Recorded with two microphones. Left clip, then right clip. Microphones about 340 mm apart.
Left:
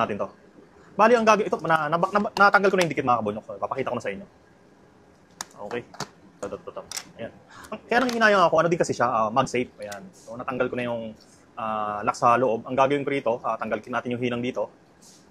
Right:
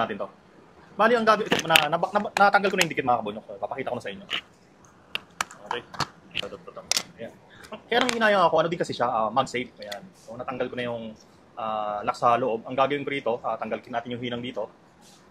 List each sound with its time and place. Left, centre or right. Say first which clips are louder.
0.0 s speech: left 2 dB; left
1.9 s speech: left 2 dB; centre
7.7 s speech: left 1 dB; left